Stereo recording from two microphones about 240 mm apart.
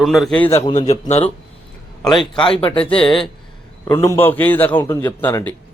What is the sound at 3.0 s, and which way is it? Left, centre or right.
Speech, centre.